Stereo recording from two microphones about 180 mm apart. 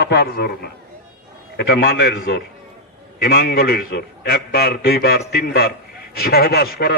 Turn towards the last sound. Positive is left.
turn(degrees=60)  # may be behind; listen again after turning